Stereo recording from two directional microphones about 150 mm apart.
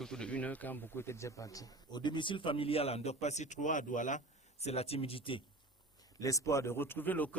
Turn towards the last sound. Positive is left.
turn(degrees=10)  # may be behind; listen again after turning